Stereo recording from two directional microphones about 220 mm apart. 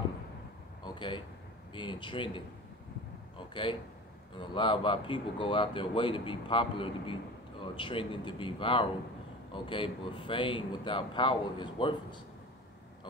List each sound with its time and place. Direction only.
0.9 s speech: 20° left (ahead or behind)
3.3 s a sound: 25° left (ahead or behind)
4.4 s speech: 20° left (ahead or behind)